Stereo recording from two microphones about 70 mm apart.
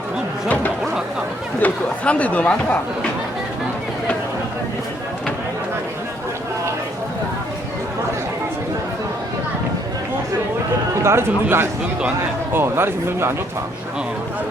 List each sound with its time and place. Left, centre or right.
0.4 s speech: left
11.0 s speech: right